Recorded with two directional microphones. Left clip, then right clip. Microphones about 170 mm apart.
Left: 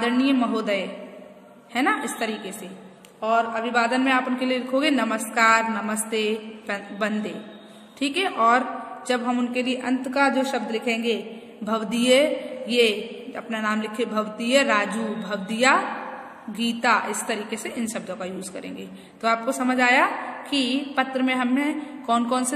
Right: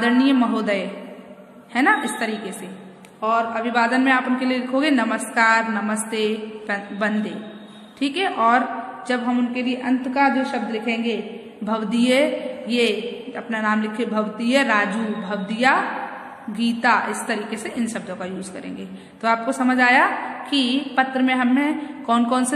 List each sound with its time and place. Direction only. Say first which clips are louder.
0.0 s a man's voice: right 4 dB; 15° left (ahead or behind)